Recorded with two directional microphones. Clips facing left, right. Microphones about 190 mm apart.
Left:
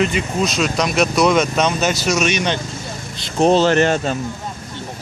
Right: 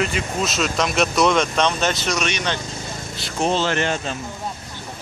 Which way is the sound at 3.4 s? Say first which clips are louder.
Left 7 dB; 40° left (ahead or behind).